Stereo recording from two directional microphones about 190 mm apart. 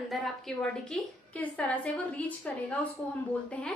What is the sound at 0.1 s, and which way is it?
A woman's voice, 5° left (ahead or behind).